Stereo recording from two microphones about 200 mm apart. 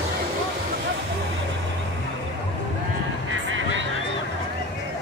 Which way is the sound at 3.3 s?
75° right (ahead or behind).